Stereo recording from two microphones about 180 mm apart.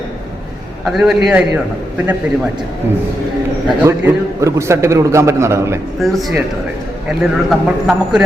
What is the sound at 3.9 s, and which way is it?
A man's voice, 15° right (ahead or behind).